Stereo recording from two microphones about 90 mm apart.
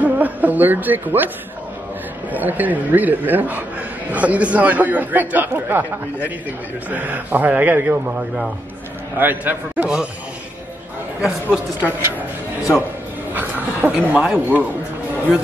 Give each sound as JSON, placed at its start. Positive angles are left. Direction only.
{"t": 0.0, "sound": "speech", "side_deg": -15}
{"t": 2.3, "sound": "a man's voice", "side_deg": -20}
{"t": 6.9, "sound": "a man's voice", "side_deg": -20}
{"t": 11.1, "sound": "speech", "side_deg": -10}
{"t": 13.3, "sound": "speech", "side_deg": -20}